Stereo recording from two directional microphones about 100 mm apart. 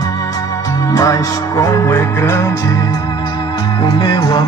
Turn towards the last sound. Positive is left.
turn(degrees=45)  # may be behind; listen again after turning